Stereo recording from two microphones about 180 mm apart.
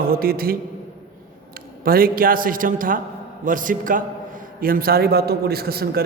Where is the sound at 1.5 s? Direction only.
55° right (ahead or behind).